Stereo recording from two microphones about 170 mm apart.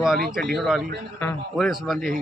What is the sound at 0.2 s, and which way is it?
Speech, 65° right (ahead or behind).